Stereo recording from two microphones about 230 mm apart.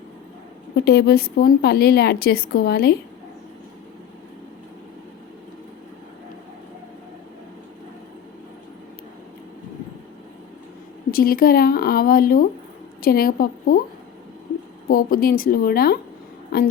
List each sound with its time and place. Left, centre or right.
0.9 s a woman's voice: left
11.1 s speech: left
14.8 s speech: left